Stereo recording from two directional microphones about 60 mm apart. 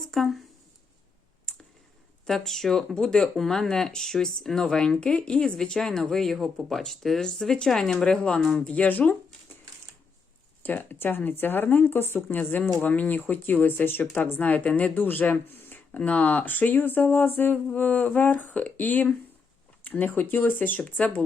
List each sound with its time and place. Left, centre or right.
0.1 s speech: centre
1.5 s clicking: centre
2.2 s speech: centre
8.6 s speech: left
10.6 s speech: left
14.9 s speech: left
15.9 s speech: left